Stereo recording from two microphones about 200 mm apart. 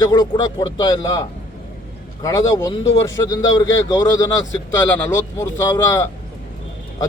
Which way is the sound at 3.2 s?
20° left (ahead or behind).